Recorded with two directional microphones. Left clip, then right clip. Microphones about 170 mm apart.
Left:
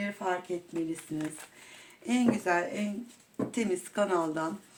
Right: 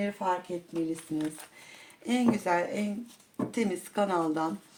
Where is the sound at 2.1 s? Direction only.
40° right (ahead or behind).